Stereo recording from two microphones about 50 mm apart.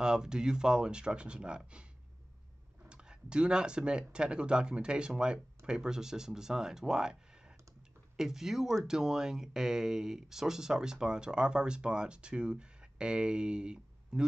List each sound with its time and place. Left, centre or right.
0.0 s speech: centre
2.9 s speech: centre